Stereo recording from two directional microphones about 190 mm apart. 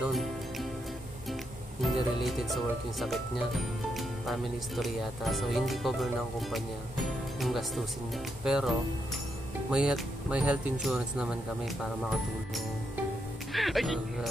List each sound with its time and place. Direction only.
0.0 s speech: centre (ahead or behind)
1.8 s speech: centre (ahead or behind)
7.3 s speech: centre (ahead or behind)
13.5 s speech: centre (ahead or behind)